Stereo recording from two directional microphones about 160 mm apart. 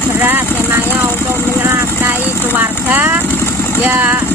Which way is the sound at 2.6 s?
10° right (ahead or behind).